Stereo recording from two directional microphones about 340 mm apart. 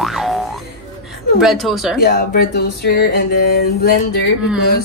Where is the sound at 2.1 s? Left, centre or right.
Left.